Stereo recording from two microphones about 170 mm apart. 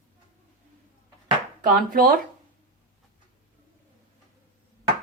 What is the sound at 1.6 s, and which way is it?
Speech, 55° right (ahead or behind).